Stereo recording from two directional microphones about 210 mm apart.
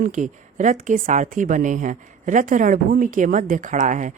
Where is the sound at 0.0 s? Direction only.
35° right (ahead or behind).